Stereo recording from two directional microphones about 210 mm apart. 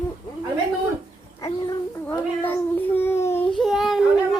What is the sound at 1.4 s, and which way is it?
Child singing, 15° left (ahead or behind).